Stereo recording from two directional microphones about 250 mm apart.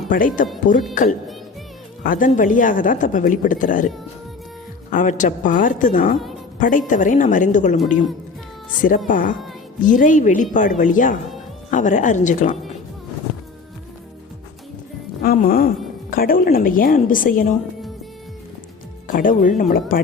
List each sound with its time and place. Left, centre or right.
0.1 s a woman's voice: left
2.0 s a woman's voice: left
6.1 s a woman's voice: centre
6.6 s a woman's voice: left
9.0 s a woman's voice: left
15.2 s a woman's voice: left
19.0 s speech: left